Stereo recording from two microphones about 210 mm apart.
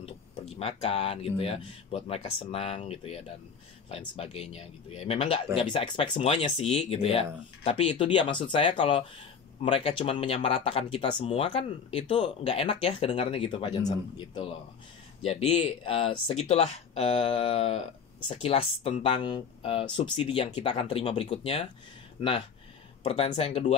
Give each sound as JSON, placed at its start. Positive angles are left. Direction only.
{"t": 0.0, "sound": "speech", "side_deg": 30}
{"t": 23.0, "sound": "speech", "side_deg": 30}